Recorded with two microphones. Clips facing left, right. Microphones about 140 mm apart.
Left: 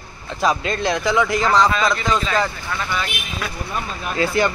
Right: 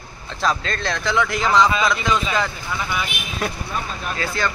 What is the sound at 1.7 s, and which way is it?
Speech, 10° right (ahead or behind).